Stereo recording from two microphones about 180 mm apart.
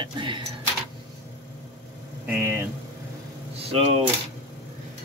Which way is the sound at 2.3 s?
15° right (ahead or behind).